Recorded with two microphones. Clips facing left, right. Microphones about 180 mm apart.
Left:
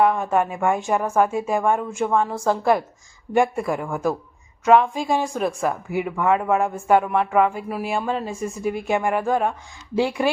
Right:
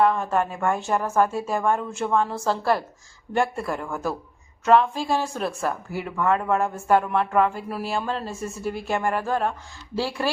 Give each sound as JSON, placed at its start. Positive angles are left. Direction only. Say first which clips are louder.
{"t": 0.0, "sound": "speech", "louder": "left 2 dB", "side_deg": 15}